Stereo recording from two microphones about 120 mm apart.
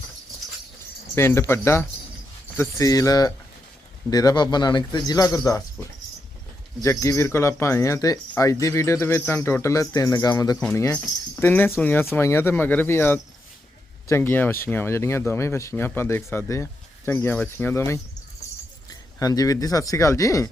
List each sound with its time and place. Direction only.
1.1 s speech: 20° left (ahead or behind)
6.8 s speech: 25° left (ahead or behind)
10.9 s speech: 15° left (ahead or behind)